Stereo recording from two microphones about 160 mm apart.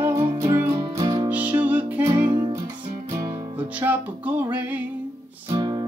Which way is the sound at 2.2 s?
25° right (ahead or behind).